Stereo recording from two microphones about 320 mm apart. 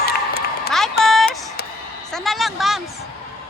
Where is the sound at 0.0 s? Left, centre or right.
Left.